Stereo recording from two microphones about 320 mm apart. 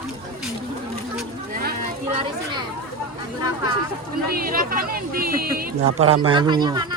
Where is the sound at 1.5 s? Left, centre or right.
Right.